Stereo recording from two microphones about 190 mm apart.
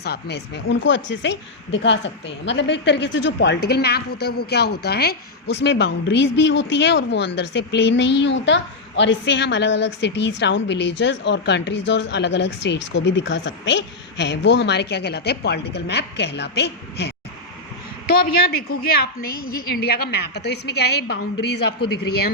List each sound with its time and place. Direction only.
0.0 s a woman's voice: 60° left (ahead or behind)
18.1 s a woman's voice: 55° left (ahead or behind)